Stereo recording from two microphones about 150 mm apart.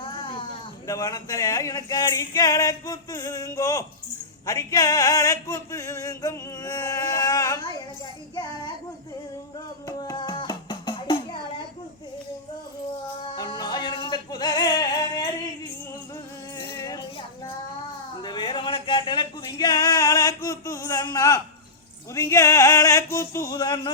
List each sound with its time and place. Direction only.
0.0 s cat: 35° left (ahead or behind)
0.9 s a sound: 25° left (ahead or behind)
4.4 s male singing: 25° left (ahead or behind)
9.8 s music: 25° left (ahead or behind)
13.3 s music: 25° left (ahead or behind)
16.6 s music: 30° left (ahead or behind)
18.2 s a sound: 30° left (ahead or behind)